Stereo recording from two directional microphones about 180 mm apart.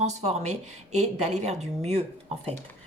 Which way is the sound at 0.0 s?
40° right (ahead or behind).